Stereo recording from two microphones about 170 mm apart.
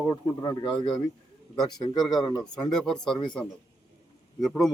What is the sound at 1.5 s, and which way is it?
Speech, centre (ahead or behind).